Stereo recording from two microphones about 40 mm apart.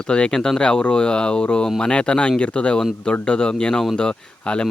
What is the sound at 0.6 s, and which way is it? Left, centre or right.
Speech, left.